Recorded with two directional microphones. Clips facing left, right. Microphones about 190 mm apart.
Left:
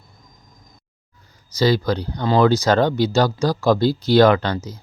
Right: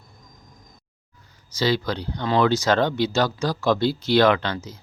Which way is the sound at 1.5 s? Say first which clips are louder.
Left 5 dB; 40° left (ahead or behind).